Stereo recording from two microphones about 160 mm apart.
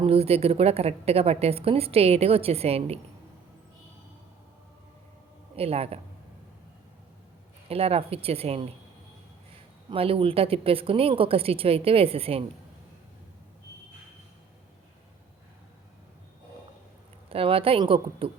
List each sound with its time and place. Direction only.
0.0 s a woman's voice: 40° right (ahead or behind)
5.5 s a woman's voice: 40° right (ahead or behind)
7.7 s a woman's voice: 40° right (ahead or behind)
9.9 s a woman's voice: 35° right (ahead or behind)
17.2 s a woman's voice: 35° right (ahead or behind)